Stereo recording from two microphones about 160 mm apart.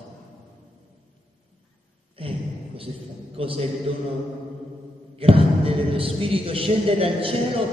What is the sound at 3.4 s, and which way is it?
Speech, 35° right (ahead or behind).